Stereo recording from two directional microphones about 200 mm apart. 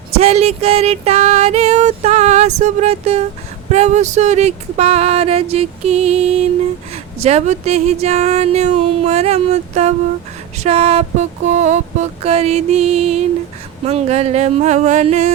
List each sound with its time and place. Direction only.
0.2 s speech: 30° right (ahead or behind)